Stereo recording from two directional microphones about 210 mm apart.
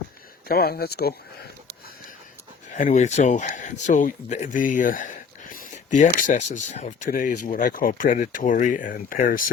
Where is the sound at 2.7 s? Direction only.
35° left (ahead or behind).